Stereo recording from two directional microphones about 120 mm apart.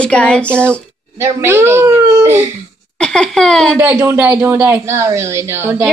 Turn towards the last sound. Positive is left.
turn(degrees=-20)  # may be behind; listen again after turning